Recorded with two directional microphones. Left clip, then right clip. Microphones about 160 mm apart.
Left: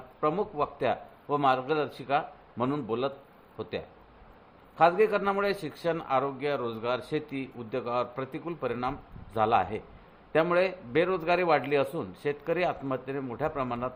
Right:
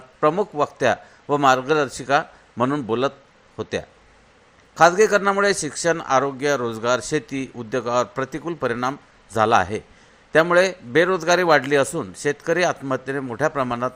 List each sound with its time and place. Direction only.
0.2 s a man's voice: 45° right (ahead or behind)